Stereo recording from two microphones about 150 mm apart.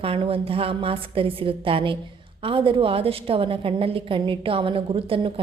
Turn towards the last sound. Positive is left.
turn(degrees=-35)  # may be behind; listen again after turning